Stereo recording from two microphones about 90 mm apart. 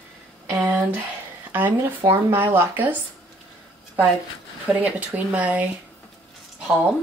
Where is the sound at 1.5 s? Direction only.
25° right (ahead or behind).